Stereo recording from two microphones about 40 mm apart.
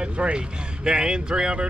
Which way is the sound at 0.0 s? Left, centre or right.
Right.